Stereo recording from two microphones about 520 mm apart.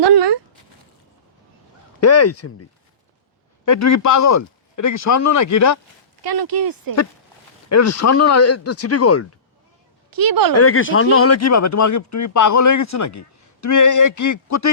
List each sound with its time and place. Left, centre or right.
0.0 s a sound: right
2.0 s speech: left
3.7 s speech: left
6.2 s speech: right
7.7 s speech: left
10.1 s speech: right
10.5 s speech: left